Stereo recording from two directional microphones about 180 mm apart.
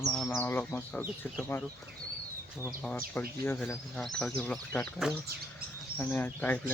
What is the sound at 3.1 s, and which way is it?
Speech, 10° left (ahead or behind).